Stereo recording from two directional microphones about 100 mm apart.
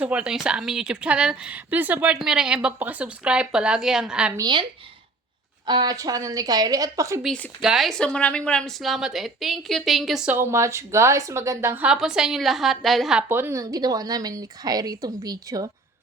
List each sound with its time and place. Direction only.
0.0 s speech: 15° right (ahead or behind)
4.4 s speech: 45° right (ahead or behind)
5.6 s a woman's voice: 45° right (ahead or behind)
7.6 s a woman's voice: 5° right (ahead or behind)
7.9 s a woman's voice: 10° left (ahead or behind)
10.3 s speech: 25° right (ahead or behind)
11.8 s a woman's voice: 5° right (ahead or behind)
13.2 s a woman's voice: 25° right (ahead or behind); by 15.7 s 40° right (ahead or behind)